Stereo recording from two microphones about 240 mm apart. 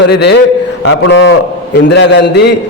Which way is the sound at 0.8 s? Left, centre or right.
Left.